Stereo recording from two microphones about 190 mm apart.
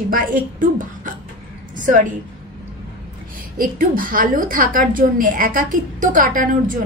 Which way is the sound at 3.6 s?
45° right (ahead or behind).